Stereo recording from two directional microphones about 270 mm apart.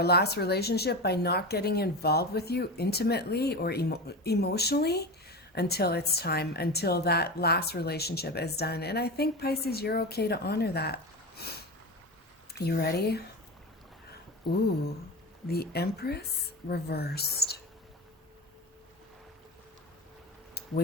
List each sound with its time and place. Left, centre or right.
0.0 s a woman's voice: left
12.5 s a woman's voice: left
15.4 s a woman's voice: left